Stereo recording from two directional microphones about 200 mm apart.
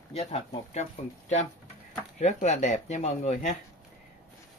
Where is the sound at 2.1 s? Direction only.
35° left (ahead or behind).